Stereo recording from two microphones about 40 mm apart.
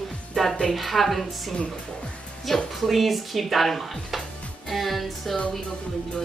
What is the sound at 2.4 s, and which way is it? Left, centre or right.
Speech, centre.